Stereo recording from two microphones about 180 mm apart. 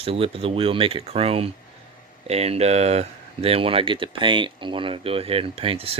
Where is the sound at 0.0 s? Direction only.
30° right (ahead or behind).